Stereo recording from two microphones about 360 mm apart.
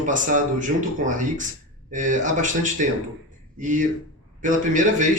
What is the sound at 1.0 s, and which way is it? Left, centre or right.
A man's voice, right.